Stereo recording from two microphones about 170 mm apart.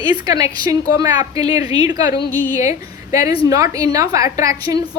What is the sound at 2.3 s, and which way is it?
Speech, 10° left (ahead or behind).